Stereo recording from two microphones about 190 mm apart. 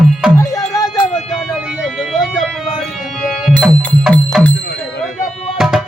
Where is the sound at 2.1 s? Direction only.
Centre (ahead or behind).